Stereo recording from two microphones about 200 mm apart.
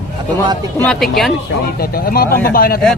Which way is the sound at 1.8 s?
50° left (ahead or behind).